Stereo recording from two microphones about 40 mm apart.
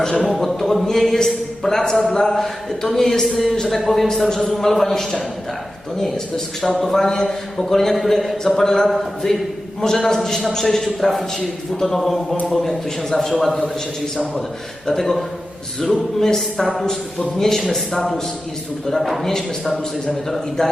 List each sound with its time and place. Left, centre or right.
0.3 s a man's voice: centre
6.6 s a man's voice: centre
14.8 s a man's voice: centre
20.6 s a man's voice: centre